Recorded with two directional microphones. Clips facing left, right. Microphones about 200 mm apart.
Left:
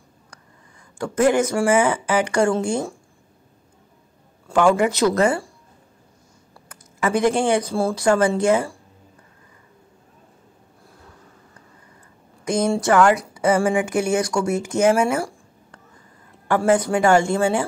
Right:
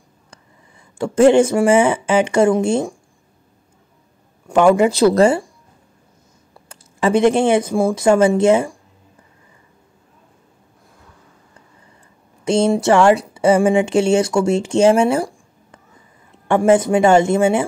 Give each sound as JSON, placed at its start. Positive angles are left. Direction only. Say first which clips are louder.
{"t": 0.9, "sound": "speech", "louder": "right 7 dB", "side_deg": -25}
{"t": 4.5, "sound": "speech", "louder": "right 4 dB", "side_deg": -20}
{"t": 6.7, "sound": "speech", "louder": "right 5 dB", "side_deg": -25}
{"t": 12.4, "sound": "speech", "louder": "right 5 dB", "side_deg": -25}